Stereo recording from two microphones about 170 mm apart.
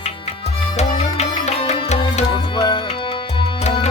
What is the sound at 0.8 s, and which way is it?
Music, 40° left (ahead or behind).